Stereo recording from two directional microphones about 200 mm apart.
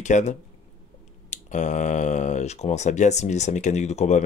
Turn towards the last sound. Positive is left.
turn(degrees=35)  # may be behind; listen again after turning